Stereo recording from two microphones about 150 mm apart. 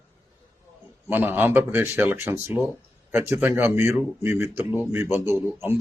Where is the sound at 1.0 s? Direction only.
15° right (ahead or behind).